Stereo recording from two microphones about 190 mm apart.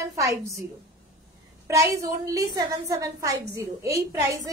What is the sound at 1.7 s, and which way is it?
A woman's voice, 15° right (ahead or behind).